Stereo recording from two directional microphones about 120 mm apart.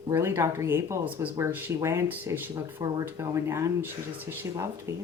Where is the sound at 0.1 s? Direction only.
20° right (ahead or behind).